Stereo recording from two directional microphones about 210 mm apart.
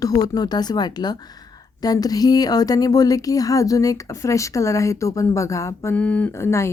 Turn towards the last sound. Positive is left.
turn(degrees=10)  # may be behind; listen again after turning